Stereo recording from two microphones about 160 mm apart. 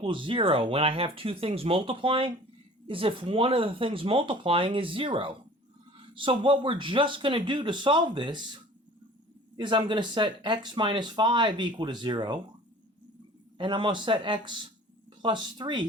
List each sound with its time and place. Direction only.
0.0 s speech: 30° right (ahead or behind)
9.6 s speech: 30° right (ahead or behind)
13.6 s speech: 30° right (ahead or behind)